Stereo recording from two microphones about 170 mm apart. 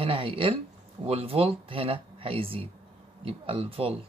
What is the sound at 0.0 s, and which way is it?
Speech, 30° right (ahead or behind).